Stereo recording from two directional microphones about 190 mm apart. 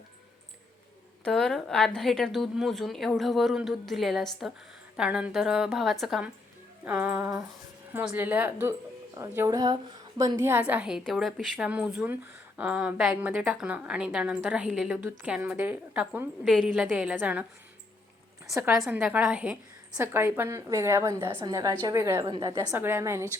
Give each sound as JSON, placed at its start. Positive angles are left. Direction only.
{"t": 1.2, "sound": "a woman's voice", "side_deg": 0}
{"t": 18.8, "sound": "a woman's voice", "side_deg": -5}